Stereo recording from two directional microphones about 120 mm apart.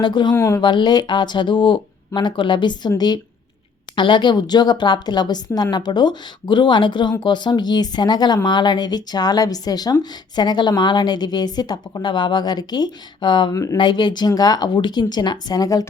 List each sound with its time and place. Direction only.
0.0 s speech: 40° left (ahead or behind)
0.3 s speech: 25° left (ahead or behind)
0.6 s speech: 40° left (ahead or behind)
3.9 s speech: 40° left (ahead or behind)
13.5 s speech: 30° left (ahead or behind)
13.7 s speech: 40° left (ahead or behind)